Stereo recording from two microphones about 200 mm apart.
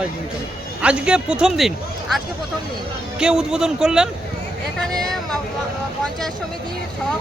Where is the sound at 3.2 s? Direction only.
5° right (ahead or behind).